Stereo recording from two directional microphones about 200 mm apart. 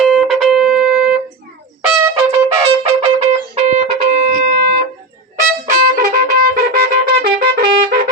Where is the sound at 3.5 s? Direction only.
35° right (ahead or behind).